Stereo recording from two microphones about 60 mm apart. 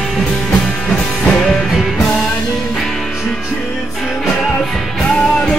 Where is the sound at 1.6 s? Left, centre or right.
Centre.